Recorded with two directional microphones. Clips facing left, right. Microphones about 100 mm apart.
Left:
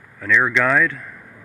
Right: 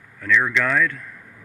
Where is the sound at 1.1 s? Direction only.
25° left (ahead or behind).